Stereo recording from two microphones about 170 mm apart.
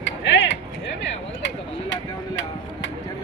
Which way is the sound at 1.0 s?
90° left.